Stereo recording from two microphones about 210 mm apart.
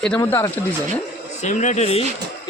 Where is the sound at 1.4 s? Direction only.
35° left (ahead or behind).